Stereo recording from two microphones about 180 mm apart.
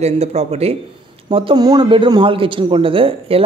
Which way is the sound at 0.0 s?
35° right (ahead or behind).